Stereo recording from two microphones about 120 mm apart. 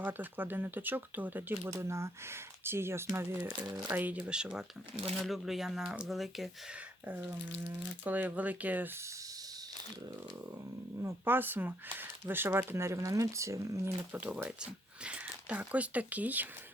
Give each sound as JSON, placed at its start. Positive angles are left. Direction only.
{"t": 0.0, "sound": "speech", "side_deg": -15}
{"t": 7.0, "sound": "speech", "side_deg": -10}
{"t": 11.0, "sound": "speech", "side_deg": -15}
{"t": 14.1, "sound": "speech", "side_deg": -15}